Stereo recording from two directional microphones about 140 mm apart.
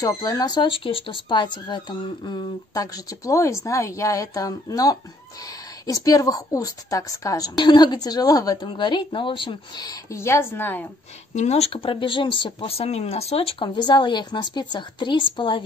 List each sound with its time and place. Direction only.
0.0 s a woman's voice: 25° left (ahead or behind)
11.3 s speech: 50° left (ahead or behind); by 15.6 s 35° left (ahead or behind)